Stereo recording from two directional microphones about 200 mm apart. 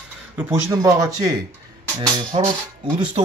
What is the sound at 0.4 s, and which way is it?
Speech, 15° right (ahead or behind).